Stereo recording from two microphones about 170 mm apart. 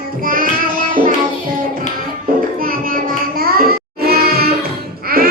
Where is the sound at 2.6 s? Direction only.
55° right (ahead or behind).